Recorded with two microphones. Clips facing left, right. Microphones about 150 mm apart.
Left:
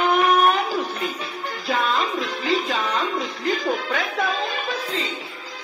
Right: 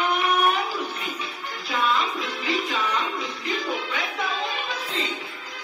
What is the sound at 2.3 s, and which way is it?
Music, 35° left (ahead or behind).